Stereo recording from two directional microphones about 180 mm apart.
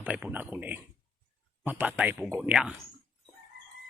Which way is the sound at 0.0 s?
10° right (ahead or behind).